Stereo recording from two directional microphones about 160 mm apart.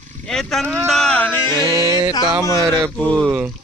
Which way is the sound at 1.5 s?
25° right (ahead or behind).